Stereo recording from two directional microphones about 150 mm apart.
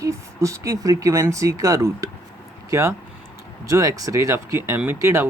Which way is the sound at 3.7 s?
20° right (ahead or behind).